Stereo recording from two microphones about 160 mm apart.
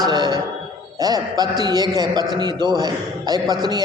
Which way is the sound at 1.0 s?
25° right (ahead or behind).